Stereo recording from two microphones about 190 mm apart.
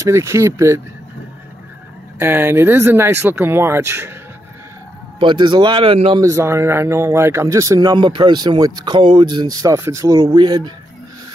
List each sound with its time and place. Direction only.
0.0 s speech: 15° right (ahead or behind)
2.1 s speech: 10° right (ahead or behind)
5.2 s speech: 25° right (ahead or behind)
6.2 s speech: 15° right (ahead or behind)